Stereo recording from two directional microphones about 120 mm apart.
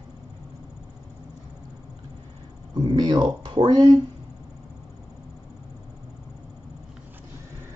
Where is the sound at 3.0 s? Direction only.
40° right (ahead or behind).